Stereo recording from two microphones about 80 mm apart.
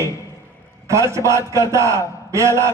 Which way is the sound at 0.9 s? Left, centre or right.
Right.